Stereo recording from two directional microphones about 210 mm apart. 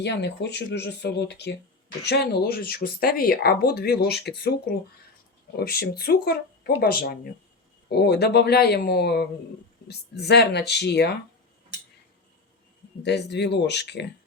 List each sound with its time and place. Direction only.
0.0 s speech: 55° left (ahead or behind)
5.5 s speech: 50° left (ahead or behind)
13.0 s speech: 55° left (ahead or behind)